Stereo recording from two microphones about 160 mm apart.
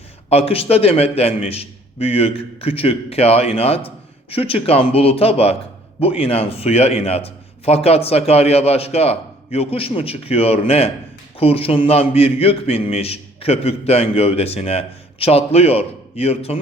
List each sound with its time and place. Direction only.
0.3 s a man's voice: 40° left (ahead or behind)